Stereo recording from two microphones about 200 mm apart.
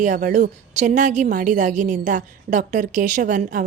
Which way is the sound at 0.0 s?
40° right (ahead or behind).